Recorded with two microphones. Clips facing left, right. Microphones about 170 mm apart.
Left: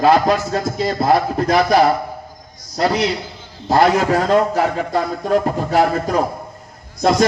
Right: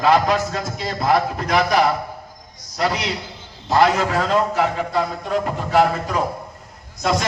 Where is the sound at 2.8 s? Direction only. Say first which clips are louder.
Left 5 dB; 40° left (ahead or behind).